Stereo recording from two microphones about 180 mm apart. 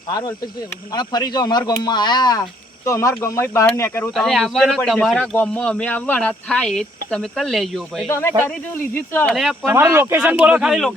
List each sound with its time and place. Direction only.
0.1 s speech: 20° left (ahead or behind)
4.1 s speech: centre (ahead or behind)
8.4 s speech: 10° left (ahead or behind)
9.3 s speech: centre (ahead or behind)
9.7 s speech: 15° right (ahead or behind)